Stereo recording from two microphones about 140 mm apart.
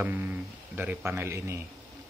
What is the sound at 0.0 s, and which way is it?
Speech, 15° right (ahead or behind).